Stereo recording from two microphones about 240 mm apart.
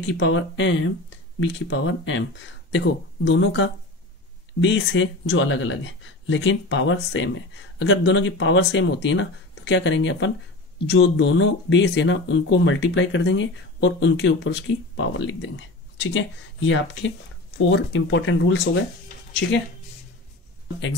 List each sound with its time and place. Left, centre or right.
0.0 s speech: left